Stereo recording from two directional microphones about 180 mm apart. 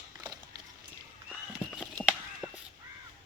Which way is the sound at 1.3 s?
5° left (ahead or behind).